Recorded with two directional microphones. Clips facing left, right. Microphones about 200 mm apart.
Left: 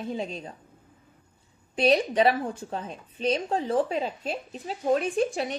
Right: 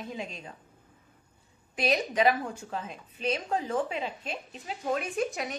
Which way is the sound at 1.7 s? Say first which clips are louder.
Left 6 dB; 30° left (ahead or behind).